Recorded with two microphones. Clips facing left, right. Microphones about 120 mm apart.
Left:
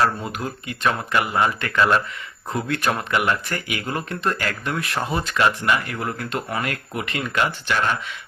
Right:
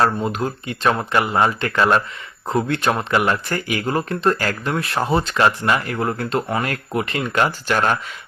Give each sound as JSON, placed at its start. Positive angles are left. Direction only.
{"t": 0.0, "sound": "speech", "side_deg": -30}